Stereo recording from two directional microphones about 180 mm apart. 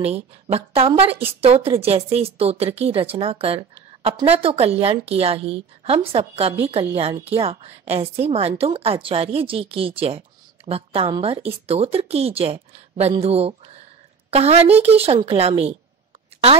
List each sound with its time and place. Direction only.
0.0 s a woman's voice: 35° right (ahead or behind)